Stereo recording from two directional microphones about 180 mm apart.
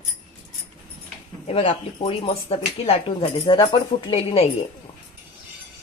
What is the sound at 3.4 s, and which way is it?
Speech, 25° left (ahead or behind).